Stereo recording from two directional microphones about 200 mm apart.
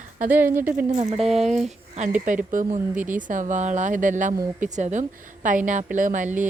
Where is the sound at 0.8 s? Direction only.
35° right (ahead or behind).